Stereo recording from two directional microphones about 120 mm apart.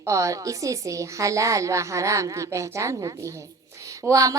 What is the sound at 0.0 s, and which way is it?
A woman's voice, 25° right (ahead or behind).